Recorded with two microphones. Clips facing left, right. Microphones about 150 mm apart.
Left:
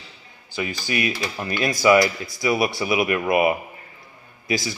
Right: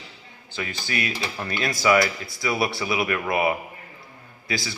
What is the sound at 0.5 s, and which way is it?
Speech, 15° left (ahead or behind).